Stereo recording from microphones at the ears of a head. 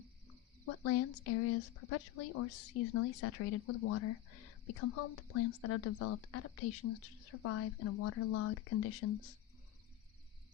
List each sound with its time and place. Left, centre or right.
0.6 s a woman's voice: left